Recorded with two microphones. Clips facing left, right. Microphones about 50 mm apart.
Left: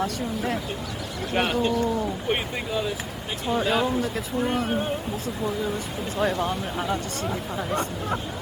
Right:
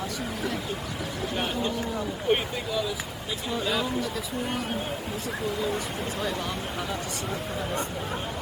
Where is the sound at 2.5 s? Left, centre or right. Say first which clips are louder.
Left 2 dB; left.